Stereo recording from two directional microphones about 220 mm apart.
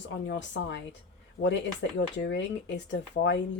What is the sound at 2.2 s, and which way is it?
Speech, 55° left (ahead or behind).